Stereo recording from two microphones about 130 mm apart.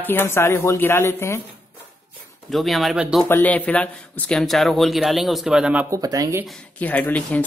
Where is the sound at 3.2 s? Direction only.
15° left (ahead or behind); by 5.8 s 5° right (ahead or behind).